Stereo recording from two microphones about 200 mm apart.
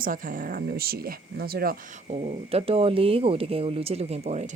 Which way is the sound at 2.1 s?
30° right (ahead or behind).